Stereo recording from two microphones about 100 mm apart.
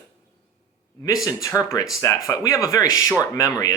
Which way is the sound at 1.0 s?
35° left (ahead or behind).